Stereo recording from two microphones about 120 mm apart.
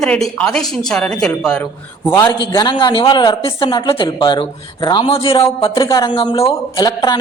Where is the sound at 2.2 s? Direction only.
30° left (ahead or behind).